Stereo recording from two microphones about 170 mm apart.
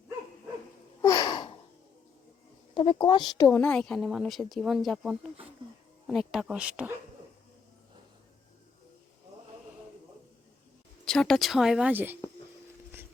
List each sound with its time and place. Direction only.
1.0 s a sound: 25° left (ahead or behind)
2.7 s speech: 30° left (ahead or behind)
3.6 s speech: 5° left (ahead or behind)
11.0 s speech: 5° left (ahead or behind)